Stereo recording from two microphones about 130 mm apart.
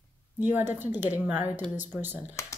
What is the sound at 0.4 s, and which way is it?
A woman's voice, 15° right (ahead or behind).